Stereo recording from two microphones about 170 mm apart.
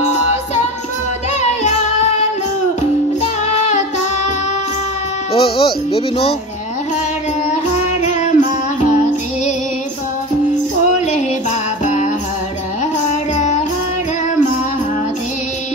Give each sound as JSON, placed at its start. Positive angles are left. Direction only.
{"t": 1.4, "sound": "music", "side_deg": 45}
{"t": 5.3, "sound": "speech", "side_deg": 35}
{"t": 8.0, "sound": "music", "side_deg": 45}
{"t": 11.8, "sound": "music", "side_deg": 45}